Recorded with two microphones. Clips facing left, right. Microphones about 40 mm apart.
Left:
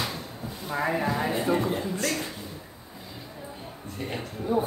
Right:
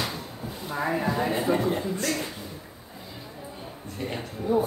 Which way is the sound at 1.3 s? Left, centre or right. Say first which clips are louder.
Right 1 dB; centre.